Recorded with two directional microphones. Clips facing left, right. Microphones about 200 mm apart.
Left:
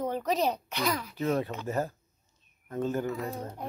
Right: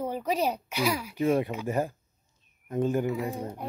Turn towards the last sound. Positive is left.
turn(degrees=-10)  # may be behind; listen again after turning